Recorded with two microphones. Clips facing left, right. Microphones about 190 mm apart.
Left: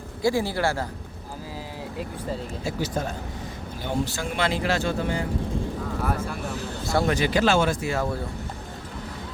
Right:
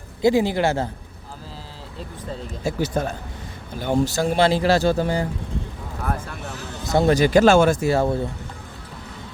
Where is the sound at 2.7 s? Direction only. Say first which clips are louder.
Right 5 dB; 55° right (ahead or behind).